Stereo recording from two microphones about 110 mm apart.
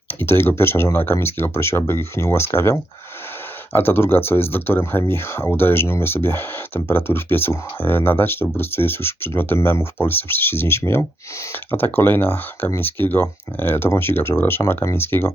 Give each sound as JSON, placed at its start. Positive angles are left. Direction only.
{"t": 0.1, "sound": "speech", "side_deg": 20}